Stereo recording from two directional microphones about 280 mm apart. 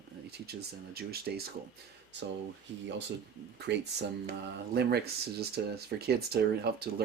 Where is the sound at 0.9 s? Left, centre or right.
Right.